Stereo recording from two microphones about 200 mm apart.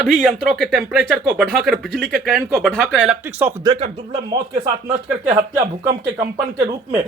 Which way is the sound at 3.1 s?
10° right (ahead or behind).